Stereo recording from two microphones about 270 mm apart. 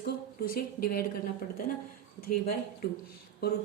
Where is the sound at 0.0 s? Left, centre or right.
Left.